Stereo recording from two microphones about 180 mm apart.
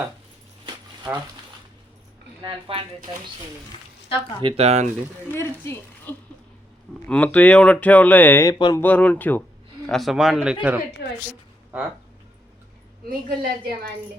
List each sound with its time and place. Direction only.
0.6 s dog: 20° right (ahead or behind)
2.4 s speech: 30° right (ahead or behind)
4.4 s speech: 35° right (ahead or behind)
5.3 s speech: 15° left (ahead or behind)
8.5 s speech: 25° left (ahead or behind)
8.8 s a man's voice: 10° left (ahead or behind)
11.0 s a woman's voice: 70° left (ahead or behind)
13.1 s a woman's voice: 50° right (ahead or behind)